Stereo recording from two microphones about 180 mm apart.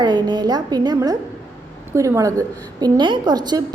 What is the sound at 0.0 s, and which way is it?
A woman's voice, 25° right (ahead or behind).